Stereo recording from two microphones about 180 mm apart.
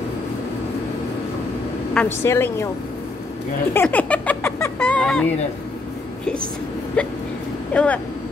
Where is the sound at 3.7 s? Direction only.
10° left (ahead or behind).